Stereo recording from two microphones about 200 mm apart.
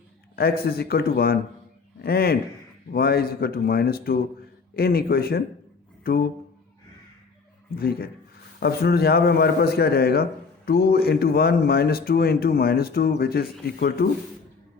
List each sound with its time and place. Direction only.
0.3 s a man's voice: 50° left (ahead or behind)
7.8 s speech: 50° left (ahead or behind)